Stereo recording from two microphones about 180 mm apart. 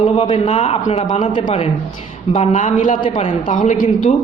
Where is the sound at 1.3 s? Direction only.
25° left (ahead or behind).